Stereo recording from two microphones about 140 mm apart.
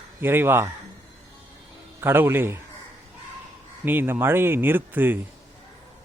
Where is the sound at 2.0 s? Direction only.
15° right (ahead or behind).